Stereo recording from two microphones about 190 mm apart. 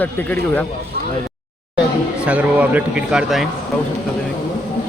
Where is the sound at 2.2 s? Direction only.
5° right (ahead or behind).